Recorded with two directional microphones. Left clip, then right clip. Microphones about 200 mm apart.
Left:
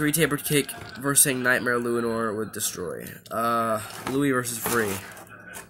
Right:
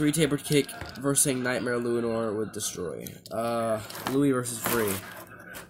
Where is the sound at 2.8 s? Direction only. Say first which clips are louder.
Left 2 dB; 15° left (ahead or behind).